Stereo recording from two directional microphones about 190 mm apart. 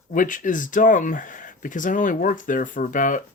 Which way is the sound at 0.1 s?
45° left (ahead or behind).